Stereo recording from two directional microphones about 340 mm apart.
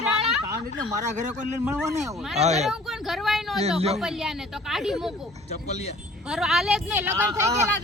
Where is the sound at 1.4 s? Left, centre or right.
Centre.